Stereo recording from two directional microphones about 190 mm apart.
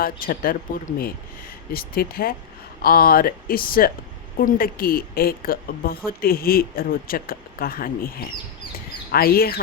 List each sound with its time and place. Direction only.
0.0 s speech: 50° left (ahead or behind)
1.7 s speech: 50° left (ahead or behind)